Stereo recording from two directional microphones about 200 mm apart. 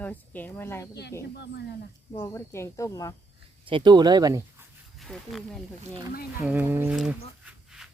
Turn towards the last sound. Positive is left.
turn(degrees=-5)  # may be behind; listen again after turning